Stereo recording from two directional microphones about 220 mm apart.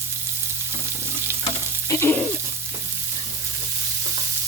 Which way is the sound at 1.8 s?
10° left (ahead or behind).